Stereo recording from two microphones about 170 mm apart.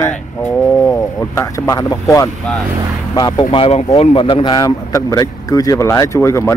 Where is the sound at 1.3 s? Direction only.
20° left (ahead or behind).